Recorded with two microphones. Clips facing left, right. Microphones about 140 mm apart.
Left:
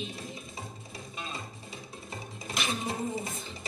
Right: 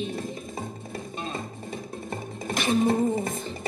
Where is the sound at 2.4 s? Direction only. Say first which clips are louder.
Right 11 dB; 55° right (ahead or behind).